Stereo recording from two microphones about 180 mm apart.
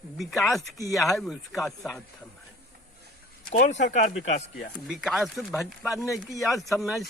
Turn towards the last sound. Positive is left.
turn(degrees=0)  # may be behind; listen again after turning